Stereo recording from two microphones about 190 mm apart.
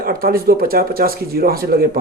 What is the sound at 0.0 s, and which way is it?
Speech, 50° right (ahead or behind).